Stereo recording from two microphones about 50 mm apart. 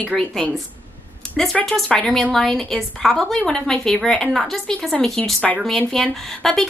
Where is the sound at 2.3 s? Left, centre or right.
Centre.